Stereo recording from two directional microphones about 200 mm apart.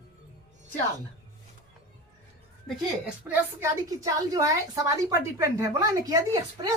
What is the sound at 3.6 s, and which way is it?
A woman's voice, 15° right (ahead or behind).